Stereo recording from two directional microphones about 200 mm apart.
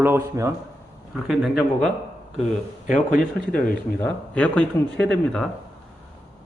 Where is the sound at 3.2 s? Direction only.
5° left (ahead or behind).